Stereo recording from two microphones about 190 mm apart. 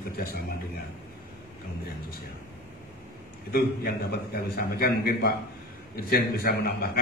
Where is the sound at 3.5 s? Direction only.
55° left (ahead or behind).